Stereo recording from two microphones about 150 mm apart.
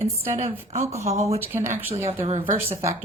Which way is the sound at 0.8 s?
20° right (ahead or behind).